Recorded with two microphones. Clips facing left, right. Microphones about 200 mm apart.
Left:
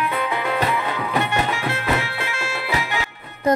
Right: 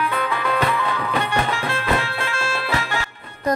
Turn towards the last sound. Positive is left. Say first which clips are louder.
# even
turn(degrees=15)  # may be behind; listen again after turning